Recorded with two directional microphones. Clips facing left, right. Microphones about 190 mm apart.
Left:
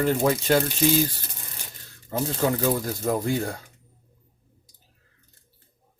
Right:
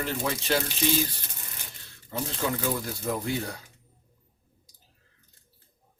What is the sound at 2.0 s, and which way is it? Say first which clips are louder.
Speech: left 6 dB; 45° left (ahead or behind).